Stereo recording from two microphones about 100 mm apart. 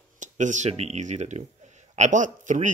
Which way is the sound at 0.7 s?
90° right.